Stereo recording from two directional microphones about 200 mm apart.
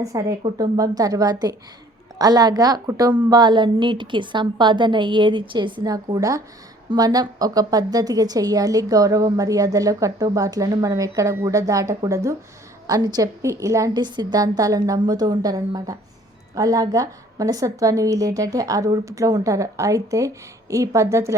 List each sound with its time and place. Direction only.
0.0 s a woman's voice: 15° right (ahead or behind)